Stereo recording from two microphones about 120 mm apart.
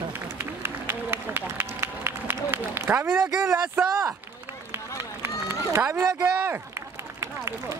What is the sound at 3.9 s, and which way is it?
Speech, 25° right (ahead or behind).